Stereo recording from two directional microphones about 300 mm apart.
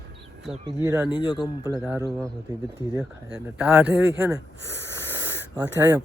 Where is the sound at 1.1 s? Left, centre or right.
Centre.